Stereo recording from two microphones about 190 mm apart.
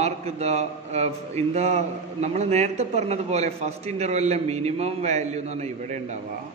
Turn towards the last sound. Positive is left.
turn(degrees=-35)  # may be behind; listen again after turning